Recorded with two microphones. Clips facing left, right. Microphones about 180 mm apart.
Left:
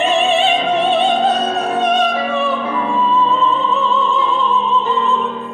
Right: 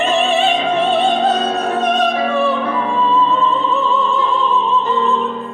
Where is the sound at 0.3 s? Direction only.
Centre (ahead or behind).